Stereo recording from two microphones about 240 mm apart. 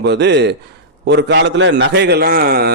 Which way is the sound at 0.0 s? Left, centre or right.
Right.